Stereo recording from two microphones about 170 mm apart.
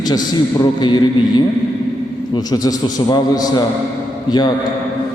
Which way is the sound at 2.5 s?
20° left (ahead or behind).